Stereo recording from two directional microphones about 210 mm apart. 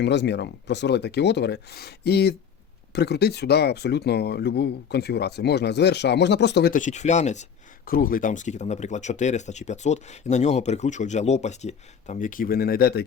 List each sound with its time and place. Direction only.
0.0 s speech: 55° left (ahead or behind)